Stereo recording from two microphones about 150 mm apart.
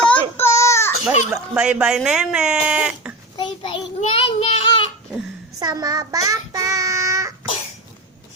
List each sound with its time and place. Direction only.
0.0 s child singing: 10° left (ahead or behind)
1.3 s speech: 5° right (ahead or behind)
3.3 s child singing: 30° left (ahead or behind)
5.5 s child singing: 25° right (ahead or behind)